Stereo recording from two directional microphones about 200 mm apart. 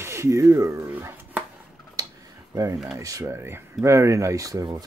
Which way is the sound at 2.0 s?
20° right (ahead or behind).